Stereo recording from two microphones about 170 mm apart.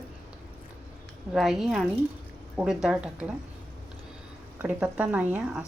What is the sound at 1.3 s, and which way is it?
A woman's voice, centre (ahead or behind).